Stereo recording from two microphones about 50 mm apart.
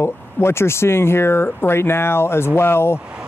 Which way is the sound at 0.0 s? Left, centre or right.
Left.